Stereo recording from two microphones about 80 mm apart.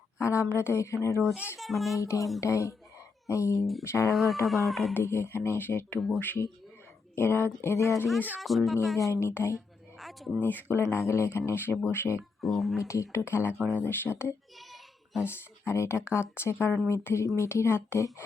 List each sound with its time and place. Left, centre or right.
0.2 s speech: left
1.5 s speech: centre
2.0 s speech: left
4.1 s speech: centre
5.0 s speech: left
8.4 s speech: centre
9.0 s speech: left
10.0 s a sound: centre
10.4 s speech: left
12.4 s speech: centre
12.9 s speech: left